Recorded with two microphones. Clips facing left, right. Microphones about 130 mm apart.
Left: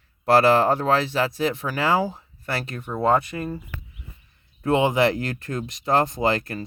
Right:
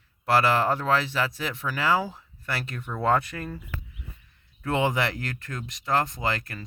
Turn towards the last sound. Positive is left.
turn(degrees=30)  # may be behind; listen again after turning